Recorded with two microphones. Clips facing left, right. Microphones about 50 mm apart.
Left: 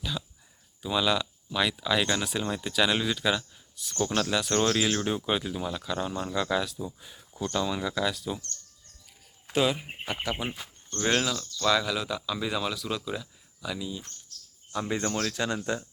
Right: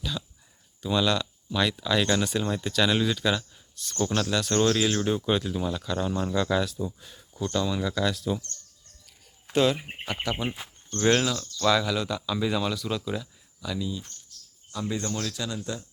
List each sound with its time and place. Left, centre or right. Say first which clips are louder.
0.8 s speech: right 1 dB; centre
9.5 s speech: right 3 dB; centre
10.6 s speech: right 2 dB; right
10.9 s speech: right 3 dB; centre
14.7 s speech: left 1 dB; left